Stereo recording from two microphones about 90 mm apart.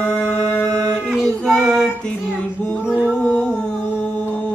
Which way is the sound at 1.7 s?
5° left (ahead or behind).